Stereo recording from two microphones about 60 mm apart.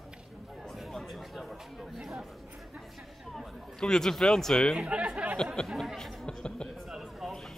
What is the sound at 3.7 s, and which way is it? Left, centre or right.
Speech, centre.